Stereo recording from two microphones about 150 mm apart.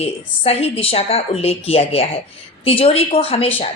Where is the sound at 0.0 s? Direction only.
45° left (ahead or behind).